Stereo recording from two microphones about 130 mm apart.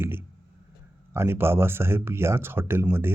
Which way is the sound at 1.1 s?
20° right (ahead or behind).